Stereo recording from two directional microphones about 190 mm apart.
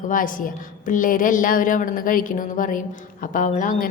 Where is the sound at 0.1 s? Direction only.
45° left (ahead or behind).